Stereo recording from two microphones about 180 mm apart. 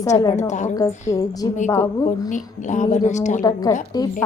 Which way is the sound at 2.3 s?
40° left (ahead or behind).